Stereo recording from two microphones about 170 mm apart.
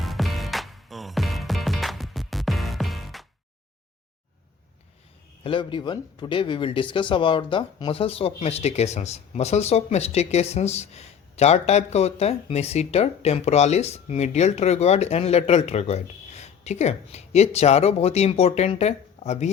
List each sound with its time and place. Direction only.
0.0 s music: centre (ahead or behind)
5.4 s speech: 30° left (ahead or behind)